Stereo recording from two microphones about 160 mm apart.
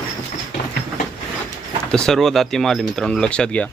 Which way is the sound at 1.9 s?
5° left (ahead or behind).